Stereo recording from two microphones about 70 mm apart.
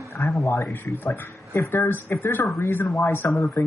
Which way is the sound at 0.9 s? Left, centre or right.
Left.